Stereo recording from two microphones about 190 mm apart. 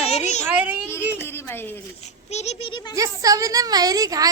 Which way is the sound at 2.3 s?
35° left (ahead or behind).